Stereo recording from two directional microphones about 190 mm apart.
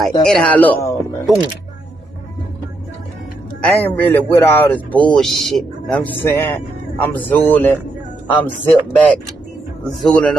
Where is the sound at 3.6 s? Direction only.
10° left (ahead or behind).